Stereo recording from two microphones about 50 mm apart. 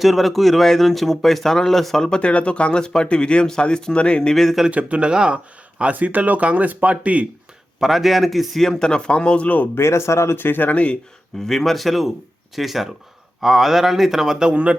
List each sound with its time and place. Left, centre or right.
0.0 s a man's voice: centre
2.0 s speech: centre
4.4 s speech: centre
4.7 s speech: right
5.8 s speech: right
7.8 s a man's voice: centre
8.6 s speech: centre
9.7 s speech: left
10.3 s speech: left
11.4 s a man's voice: centre
14.5 s speech: right